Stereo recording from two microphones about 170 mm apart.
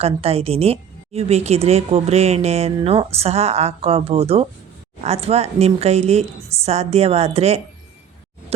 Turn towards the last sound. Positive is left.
turn(degrees=-40)  # may be behind; listen again after turning